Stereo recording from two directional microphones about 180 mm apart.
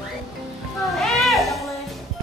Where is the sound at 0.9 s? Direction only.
Centre (ahead or behind).